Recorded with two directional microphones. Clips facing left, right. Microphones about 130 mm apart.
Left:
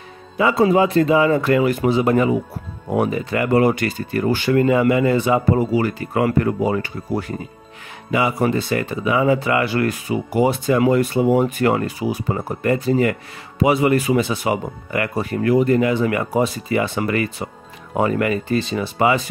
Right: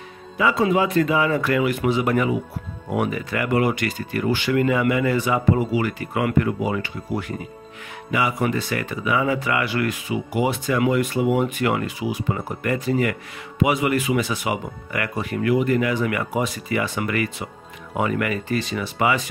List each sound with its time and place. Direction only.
0.4 s speech: 30° left (ahead or behind)
5.6 s speech: 35° left (ahead or behind)